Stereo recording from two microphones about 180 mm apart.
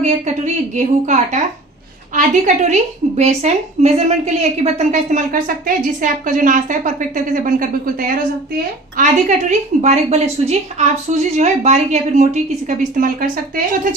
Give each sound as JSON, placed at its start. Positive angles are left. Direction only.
{"t": 0.0, "sound": "a woman's voice", "side_deg": -45}
{"t": 9.0, "sound": "a woman's voice", "side_deg": -40}